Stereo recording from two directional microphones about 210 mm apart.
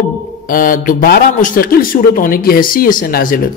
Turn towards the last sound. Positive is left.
turn(degrees=45)  # may be behind; listen again after turning